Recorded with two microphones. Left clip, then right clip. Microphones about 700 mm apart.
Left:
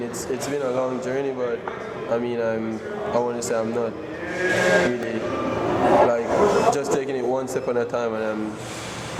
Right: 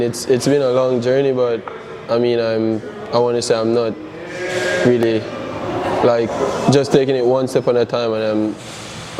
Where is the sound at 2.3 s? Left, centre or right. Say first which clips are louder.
Right 8 dB; right.